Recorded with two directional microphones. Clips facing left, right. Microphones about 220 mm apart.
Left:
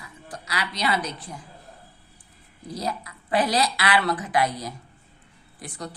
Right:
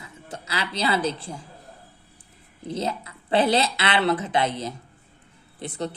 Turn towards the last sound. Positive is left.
turn(degrees=-25)  # may be behind; listen again after turning